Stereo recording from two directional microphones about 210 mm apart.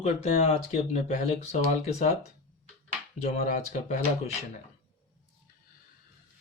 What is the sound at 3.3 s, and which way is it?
Speech, 35° left (ahead or behind).